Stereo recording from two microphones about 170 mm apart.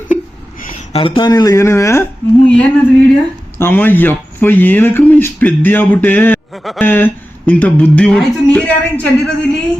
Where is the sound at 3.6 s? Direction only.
10° left (ahead or behind).